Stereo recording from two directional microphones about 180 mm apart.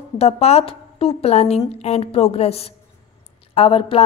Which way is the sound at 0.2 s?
35° left (ahead or behind).